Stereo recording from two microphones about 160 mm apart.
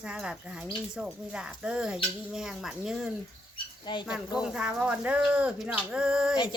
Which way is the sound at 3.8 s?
30° left (ahead or behind).